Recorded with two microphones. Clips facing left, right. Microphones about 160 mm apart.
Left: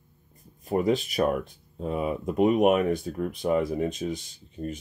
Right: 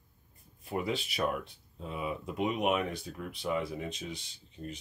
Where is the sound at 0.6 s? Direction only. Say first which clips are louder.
Left 9 dB; 45° left (ahead or behind).